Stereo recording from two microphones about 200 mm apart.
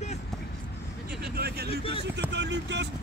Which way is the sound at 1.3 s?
50° right (ahead or behind).